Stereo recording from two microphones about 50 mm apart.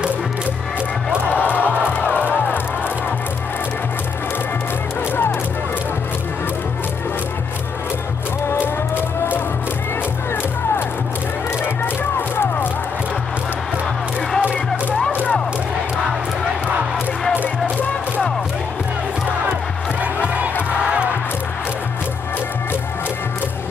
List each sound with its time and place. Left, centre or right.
1.3 s music: left
2.0 s music: right
2.3 s music: left
11.6 s music: left